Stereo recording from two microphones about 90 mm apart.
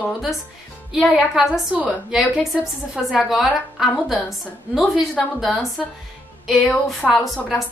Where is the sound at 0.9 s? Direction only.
5° right (ahead or behind).